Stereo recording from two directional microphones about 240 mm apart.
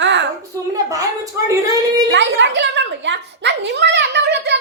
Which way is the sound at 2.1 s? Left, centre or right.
Right.